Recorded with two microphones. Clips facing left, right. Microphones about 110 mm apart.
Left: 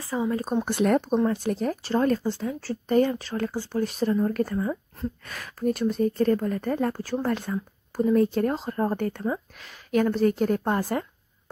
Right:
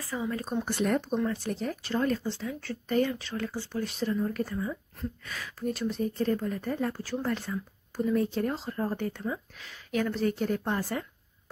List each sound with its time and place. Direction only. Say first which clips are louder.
0.0 s speech: left 6 dB; 30° left (ahead or behind)
0.7 s speech: left 6 dB; 55° left (ahead or behind)